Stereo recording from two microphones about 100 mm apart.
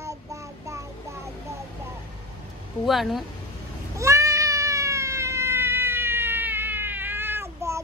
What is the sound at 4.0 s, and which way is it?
Cat, 30° right (ahead or behind).